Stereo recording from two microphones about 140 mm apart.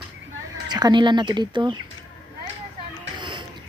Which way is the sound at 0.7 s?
30° right (ahead or behind).